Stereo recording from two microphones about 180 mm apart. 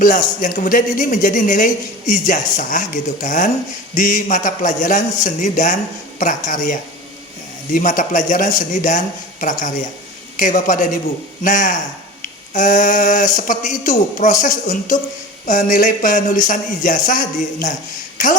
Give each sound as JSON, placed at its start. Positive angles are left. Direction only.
{"t": 0.0, "sound": "speech", "side_deg": 45}
{"t": 12.2, "sound": "a sound", "side_deg": 45}
{"t": 14.2, "sound": "speech", "side_deg": 45}